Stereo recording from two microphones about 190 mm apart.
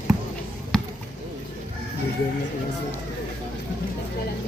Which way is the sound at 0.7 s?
Centre (ahead or behind).